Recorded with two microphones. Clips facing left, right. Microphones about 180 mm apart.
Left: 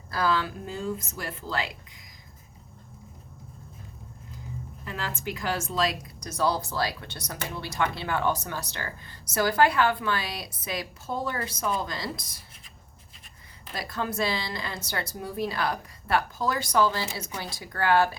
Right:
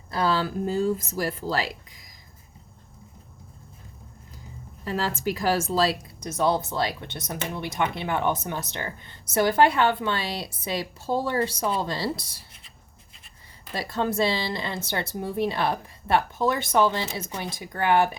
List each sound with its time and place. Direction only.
0.1 s speech: 25° right (ahead or behind)
4.9 s speech: 35° right (ahead or behind)
13.7 s speech: 25° right (ahead or behind)